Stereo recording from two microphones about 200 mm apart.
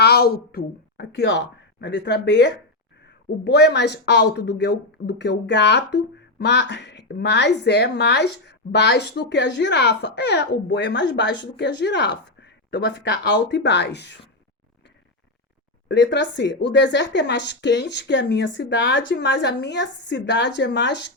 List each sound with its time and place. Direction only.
0.0 s speech: 50° left (ahead or behind)
15.9 s speech: 65° left (ahead or behind)